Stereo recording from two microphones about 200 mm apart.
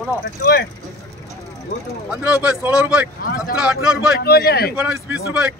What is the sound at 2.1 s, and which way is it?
Speech, 5° right (ahead or behind).